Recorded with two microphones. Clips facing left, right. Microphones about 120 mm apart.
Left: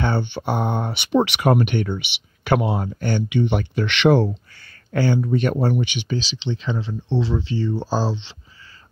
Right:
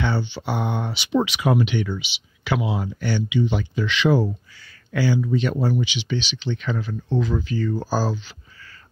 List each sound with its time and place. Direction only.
0.0 s speech: 55° left (ahead or behind); by 4.4 s 70° left (ahead or behind)
4.9 s speech: 50° left (ahead or behind)
6.1 s speech: 30° left (ahead or behind)